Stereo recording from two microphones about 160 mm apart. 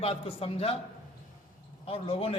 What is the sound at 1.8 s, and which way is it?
Speech, 35° left (ahead or behind).